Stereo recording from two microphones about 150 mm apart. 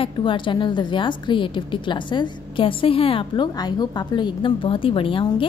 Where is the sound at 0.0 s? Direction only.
35° left (ahead or behind).